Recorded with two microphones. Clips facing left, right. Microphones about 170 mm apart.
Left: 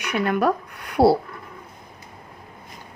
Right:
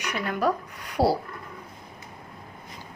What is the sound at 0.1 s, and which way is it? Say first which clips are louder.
Speech: left 5 dB; 60° left (ahead or behind).